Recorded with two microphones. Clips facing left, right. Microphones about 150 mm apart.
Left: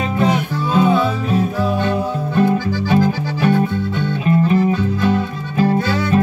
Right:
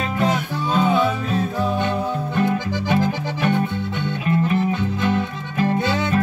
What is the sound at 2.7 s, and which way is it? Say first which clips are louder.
Music: left 4 dB; 20° right (ahead or behind).